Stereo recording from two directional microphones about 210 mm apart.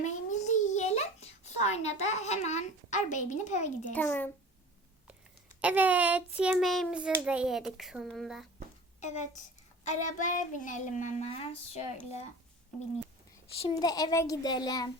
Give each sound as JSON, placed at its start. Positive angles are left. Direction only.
{"t": 0.0, "sound": "a sound", "side_deg": 35}
{"t": 3.9, "sound": "speech", "side_deg": 10}
{"t": 5.5, "sound": "a child's voice", "side_deg": -5}
{"t": 9.0, "sound": "a woman's voice", "side_deg": 35}
{"t": 13.6, "sound": "a child's voice", "side_deg": 20}